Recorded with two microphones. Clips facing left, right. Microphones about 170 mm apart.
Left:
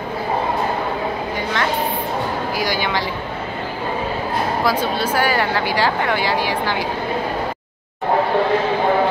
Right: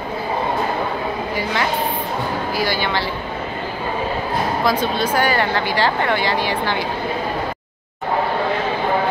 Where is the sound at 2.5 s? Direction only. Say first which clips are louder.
Right 1 dB; 15° left (ahead or behind).